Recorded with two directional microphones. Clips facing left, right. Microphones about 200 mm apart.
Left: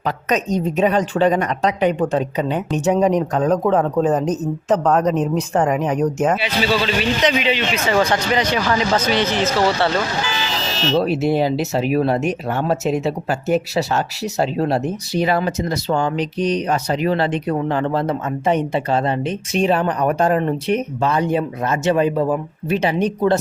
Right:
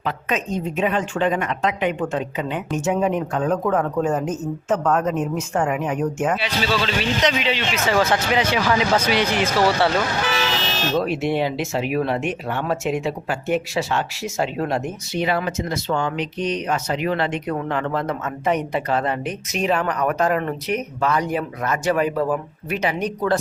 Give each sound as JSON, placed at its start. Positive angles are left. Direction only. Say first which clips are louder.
{"t": 0.0, "sound": "speech", "louder": "left 4 dB", "side_deg": 40}
{"t": 6.4, "sound": "a man's voice", "louder": "left 3 dB", "side_deg": 5}
{"t": 10.9, "sound": "speech", "louder": "left 4 dB", "side_deg": 35}